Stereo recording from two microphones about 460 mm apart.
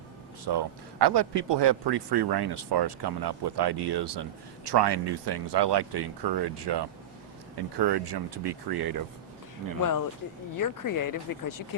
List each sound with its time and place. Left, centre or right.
0.4 s speech: right
10.6 s speech: left